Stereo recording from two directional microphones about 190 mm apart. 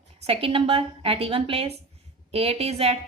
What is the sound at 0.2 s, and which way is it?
A woman's voice, 30° right (ahead or behind).